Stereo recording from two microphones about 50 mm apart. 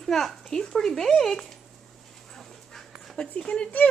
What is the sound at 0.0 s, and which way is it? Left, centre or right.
A child's voice, centre.